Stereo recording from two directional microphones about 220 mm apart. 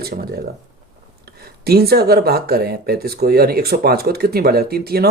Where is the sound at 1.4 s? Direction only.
45° right (ahead or behind).